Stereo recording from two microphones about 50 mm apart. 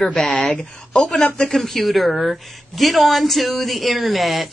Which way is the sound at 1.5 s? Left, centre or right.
Centre.